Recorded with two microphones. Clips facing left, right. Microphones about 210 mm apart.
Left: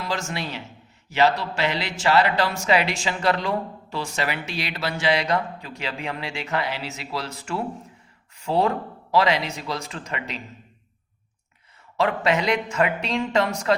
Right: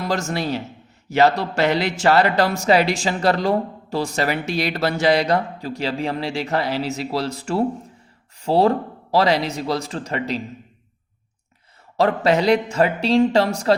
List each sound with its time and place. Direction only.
0.0 s a man's voice: 45° right (ahead or behind)
11.9 s a man's voice: 35° right (ahead or behind)